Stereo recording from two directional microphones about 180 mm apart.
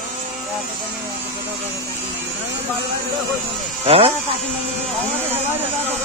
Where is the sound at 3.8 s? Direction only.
35° right (ahead or behind).